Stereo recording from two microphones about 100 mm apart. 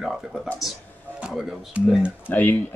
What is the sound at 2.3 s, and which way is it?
Speech, 20° left (ahead or behind).